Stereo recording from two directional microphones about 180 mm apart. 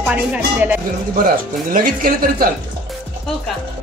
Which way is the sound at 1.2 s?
50° right (ahead or behind).